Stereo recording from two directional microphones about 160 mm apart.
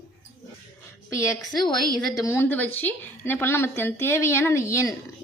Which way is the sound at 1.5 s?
25° left (ahead or behind).